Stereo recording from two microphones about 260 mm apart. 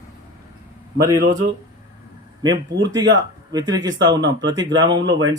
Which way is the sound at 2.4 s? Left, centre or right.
Centre.